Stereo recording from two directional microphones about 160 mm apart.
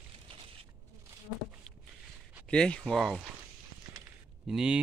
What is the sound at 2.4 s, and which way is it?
Speech, 5° left (ahead or behind).